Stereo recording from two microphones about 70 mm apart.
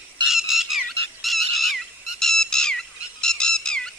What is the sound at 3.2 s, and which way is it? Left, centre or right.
Music, centre.